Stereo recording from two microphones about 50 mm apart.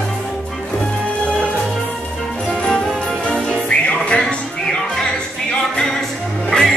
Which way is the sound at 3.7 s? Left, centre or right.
Centre.